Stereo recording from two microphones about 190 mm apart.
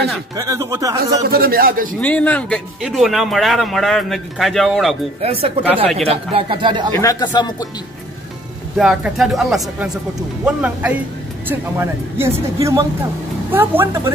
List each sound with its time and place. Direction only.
0.4 s speech: 15° right (ahead or behind)
1.3 s speech: 50° right (ahead or behind)
2.0 s speech: 5° left (ahead or behind)
5.2 s speech: 30° right (ahead or behind)
7.0 s speech: 20° left (ahead or behind)
8.7 s speech: 5° right (ahead or behind)